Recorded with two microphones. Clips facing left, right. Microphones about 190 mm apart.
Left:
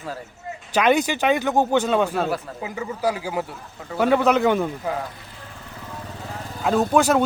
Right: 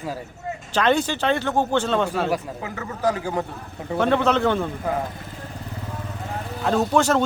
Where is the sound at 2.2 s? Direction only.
15° right (ahead or behind).